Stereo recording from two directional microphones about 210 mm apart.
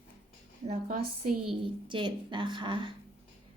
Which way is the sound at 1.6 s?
20° right (ahead or behind).